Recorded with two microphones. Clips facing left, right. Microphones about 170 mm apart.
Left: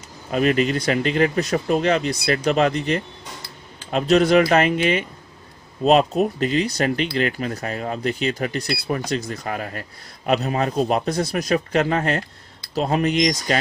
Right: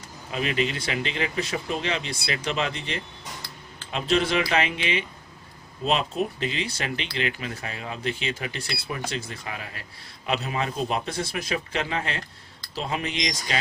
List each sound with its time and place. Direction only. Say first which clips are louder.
0.3 s a man's voice: left 8 dB; 45° left (ahead or behind)